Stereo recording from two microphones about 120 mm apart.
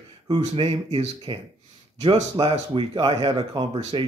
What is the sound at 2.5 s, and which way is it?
Speech, 50° right (ahead or behind).